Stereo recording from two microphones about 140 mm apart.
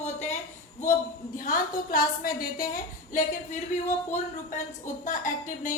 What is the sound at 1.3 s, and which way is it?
A woman's voice, 85° left.